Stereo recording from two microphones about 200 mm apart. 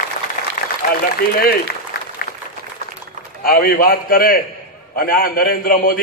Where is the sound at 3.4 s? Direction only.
45° left (ahead or behind).